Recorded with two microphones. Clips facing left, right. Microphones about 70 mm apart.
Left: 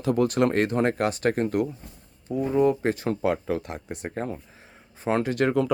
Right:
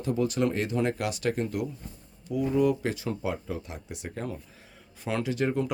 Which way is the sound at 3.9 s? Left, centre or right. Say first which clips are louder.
Left 3 dB; left.